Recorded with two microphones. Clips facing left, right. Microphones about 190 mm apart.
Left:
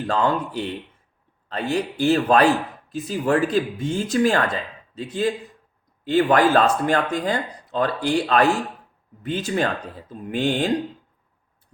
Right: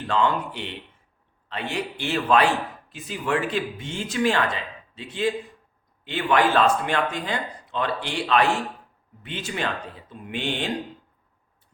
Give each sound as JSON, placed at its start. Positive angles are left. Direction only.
{"t": 0.1, "sound": "speech", "side_deg": 40}